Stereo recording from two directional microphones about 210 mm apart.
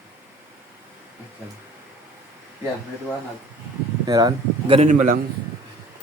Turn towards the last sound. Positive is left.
turn(degrees=-35)  # may be behind; listen again after turning